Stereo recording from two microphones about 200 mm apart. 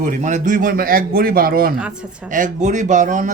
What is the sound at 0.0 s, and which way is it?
A man's voice, 40° right (ahead or behind).